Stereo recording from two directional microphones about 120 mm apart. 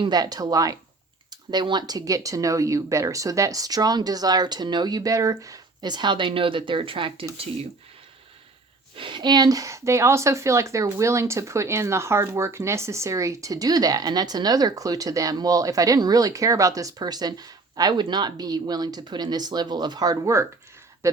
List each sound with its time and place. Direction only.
0.0 s speech: 35° right (ahead or behind)
9.0 s speech: 40° right (ahead or behind); by 21.2 s 25° right (ahead or behind)